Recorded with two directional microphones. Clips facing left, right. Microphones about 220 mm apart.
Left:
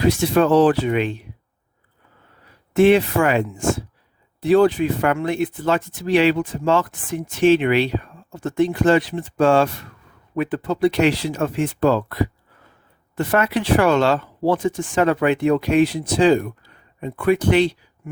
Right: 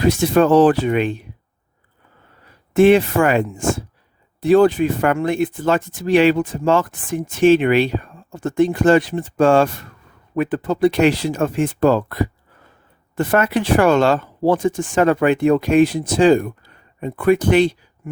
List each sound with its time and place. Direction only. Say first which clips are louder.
0.0 s speech: right 2 dB; 45° right (ahead or behind)
2.7 s speech: right 2 dB; 50° right (ahead or behind)